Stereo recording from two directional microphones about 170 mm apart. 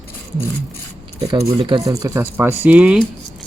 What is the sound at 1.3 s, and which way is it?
Speech, 30° right (ahead or behind).